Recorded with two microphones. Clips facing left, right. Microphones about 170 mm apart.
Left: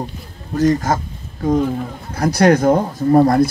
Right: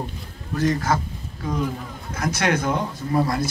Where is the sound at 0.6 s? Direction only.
40° left (ahead or behind).